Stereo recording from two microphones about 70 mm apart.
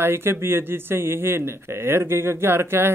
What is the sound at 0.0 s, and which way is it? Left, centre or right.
Speech, right.